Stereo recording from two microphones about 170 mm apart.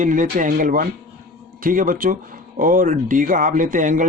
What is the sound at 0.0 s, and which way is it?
Speech, 50° right (ahead or behind).